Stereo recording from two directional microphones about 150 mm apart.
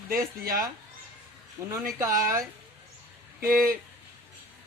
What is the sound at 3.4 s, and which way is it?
Speech, 75° right (ahead or behind).